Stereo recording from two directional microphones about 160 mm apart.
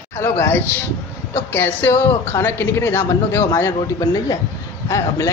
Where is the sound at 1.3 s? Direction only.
15° left (ahead or behind).